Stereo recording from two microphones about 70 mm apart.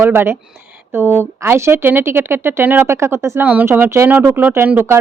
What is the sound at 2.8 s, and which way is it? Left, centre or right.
Speech, right.